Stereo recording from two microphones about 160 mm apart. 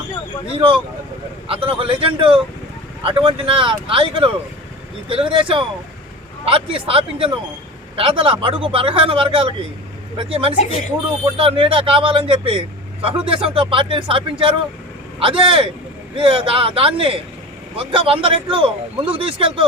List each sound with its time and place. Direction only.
0.5 s speech: 35° right (ahead or behind)